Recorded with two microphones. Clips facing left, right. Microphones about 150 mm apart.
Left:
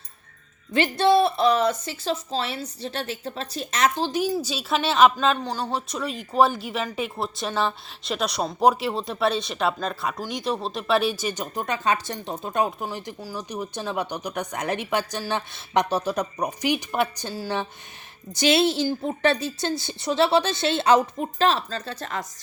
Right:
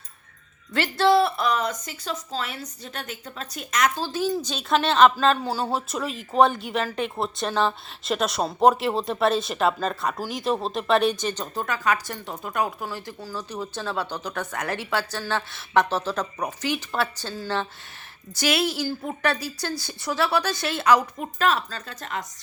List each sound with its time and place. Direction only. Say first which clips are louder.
0.7 s a woman's voice: left 1 dB; 20° left (ahead or behind)
4.4 s speech: right 2 dB; 5° left (ahead or behind)
18.3 s a woman's voice: left 4 dB; 25° left (ahead or behind)